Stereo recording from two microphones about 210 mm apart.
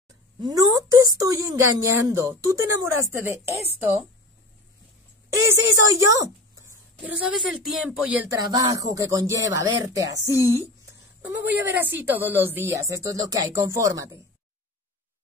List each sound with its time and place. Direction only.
0.4 s a woman's voice: 20° right (ahead or behind)
5.3 s a woman's voice: 15° right (ahead or behind)
7.2 s speech: 5° right (ahead or behind)
8.5 s a woman's voice: 15° right (ahead or behind)